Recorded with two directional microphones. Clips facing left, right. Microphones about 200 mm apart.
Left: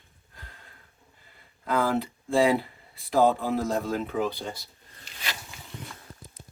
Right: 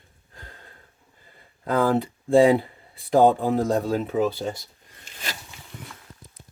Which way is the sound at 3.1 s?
50° right (ahead or behind).